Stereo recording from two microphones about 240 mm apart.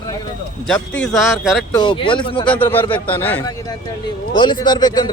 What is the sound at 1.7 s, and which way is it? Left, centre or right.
Speech, centre.